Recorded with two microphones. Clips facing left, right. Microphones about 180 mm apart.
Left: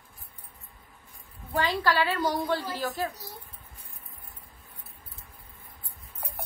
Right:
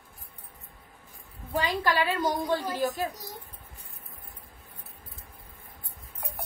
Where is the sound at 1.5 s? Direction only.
15° right (ahead or behind).